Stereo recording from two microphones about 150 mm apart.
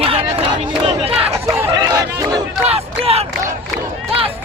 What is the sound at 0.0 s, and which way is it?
Crowd, 40° right (ahead or behind).